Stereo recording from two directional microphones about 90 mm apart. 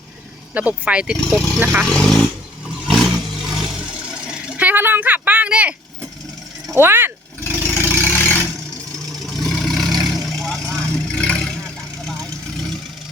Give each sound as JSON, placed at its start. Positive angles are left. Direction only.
{"t": 0.5, "sound": "speech", "side_deg": -15}
{"t": 1.1, "sound": "speech", "side_deg": 5}
{"t": 1.5, "sound": "speech", "side_deg": -15}
{"t": 1.9, "sound": "speech", "side_deg": 5}
{"t": 2.8, "sound": "vehicle", "side_deg": 0}
{"t": 6.7, "sound": "speech", "side_deg": -25}
{"t": 7.6, "sound": "vehicle", "side_deg": 25}
{"t": 9.0, "sound": "vehicle", "side_deg": 0}